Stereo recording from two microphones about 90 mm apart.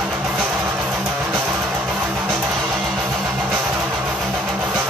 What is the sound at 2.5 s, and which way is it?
Music, centre (ahead or behind).